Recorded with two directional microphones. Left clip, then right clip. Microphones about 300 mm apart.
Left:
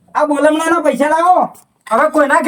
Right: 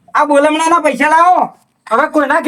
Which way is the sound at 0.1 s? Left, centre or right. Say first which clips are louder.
Right 2 dB; centre.